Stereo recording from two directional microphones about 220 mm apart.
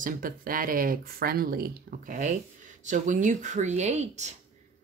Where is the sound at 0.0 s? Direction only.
40° right (ahead or behind).